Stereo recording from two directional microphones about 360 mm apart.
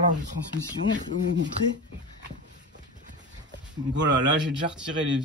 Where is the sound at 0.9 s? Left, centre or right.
Right.